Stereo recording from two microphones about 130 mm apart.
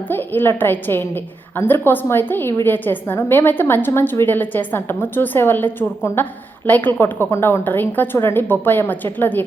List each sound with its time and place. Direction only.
0.1 s a woman's voice: 15° left (ahead or behind)